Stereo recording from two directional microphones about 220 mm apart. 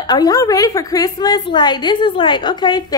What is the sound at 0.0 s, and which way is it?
A woman's voice, 15° left (ahead or behind).